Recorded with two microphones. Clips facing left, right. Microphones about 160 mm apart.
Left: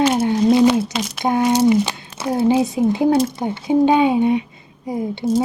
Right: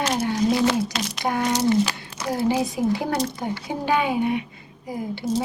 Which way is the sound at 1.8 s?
25° left (ahead or behind).